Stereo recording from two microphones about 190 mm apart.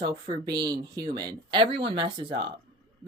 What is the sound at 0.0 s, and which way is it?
Speech, 20° right (ahead or behind).